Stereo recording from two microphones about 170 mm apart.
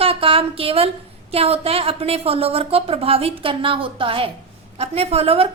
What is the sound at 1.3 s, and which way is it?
A woman's voice, 35° right (ahead or behind).